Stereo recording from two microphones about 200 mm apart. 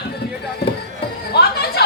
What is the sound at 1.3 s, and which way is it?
Music, 55° left (ahead or behind).